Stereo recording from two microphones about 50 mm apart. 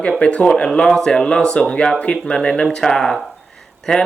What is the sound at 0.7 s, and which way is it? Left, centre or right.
Speech, centre.